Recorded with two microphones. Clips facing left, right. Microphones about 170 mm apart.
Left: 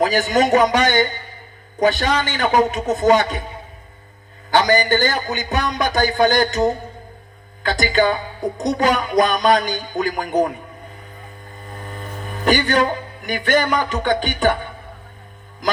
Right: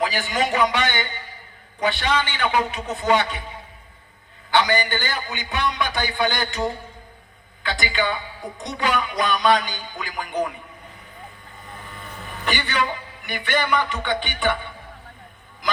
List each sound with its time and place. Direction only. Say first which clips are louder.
0.0 s speech: left 7 dB; 45° left (ahead or behind)
4.5 s speech: left 5 dB; 40° left (ahead or behind)
11.7 s speech: left 6 dB; 45° left (ahead or behind)